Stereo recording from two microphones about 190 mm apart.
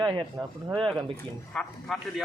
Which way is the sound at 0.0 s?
20° right (ahead or behind).